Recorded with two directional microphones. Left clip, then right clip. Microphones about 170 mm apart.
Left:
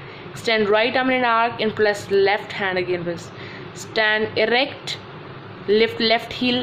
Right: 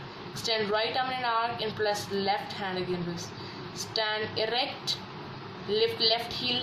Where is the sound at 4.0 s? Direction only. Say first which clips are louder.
Left 12 dB; 35° left (ahead or behind).